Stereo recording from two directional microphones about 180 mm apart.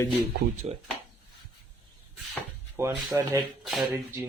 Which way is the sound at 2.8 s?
15° right (ahead or behind).